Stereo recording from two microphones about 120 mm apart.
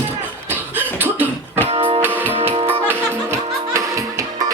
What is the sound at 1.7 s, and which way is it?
Music, 45° right (ahead or behind).